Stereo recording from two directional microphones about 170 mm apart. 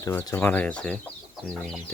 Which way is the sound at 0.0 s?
20° left (ahead or behind).